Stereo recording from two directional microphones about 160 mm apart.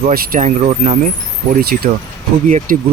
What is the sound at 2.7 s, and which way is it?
Speech, 60° right (ahead or behind).